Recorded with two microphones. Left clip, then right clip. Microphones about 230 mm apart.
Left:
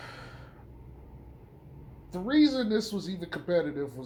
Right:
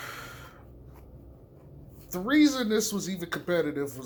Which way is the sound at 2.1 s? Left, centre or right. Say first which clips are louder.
Right 1 dB; right.